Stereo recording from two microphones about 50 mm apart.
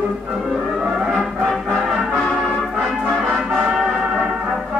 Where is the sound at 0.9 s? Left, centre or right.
Centre.